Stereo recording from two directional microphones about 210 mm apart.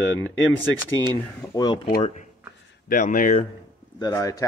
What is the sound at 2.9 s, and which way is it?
Speech, 40° left (ahead or behind).